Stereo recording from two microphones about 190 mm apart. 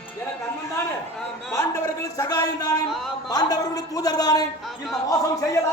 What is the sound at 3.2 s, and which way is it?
A man's voice, 20° left (ahead or behind).